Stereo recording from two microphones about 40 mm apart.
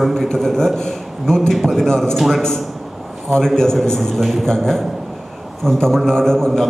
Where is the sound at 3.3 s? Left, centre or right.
Centre.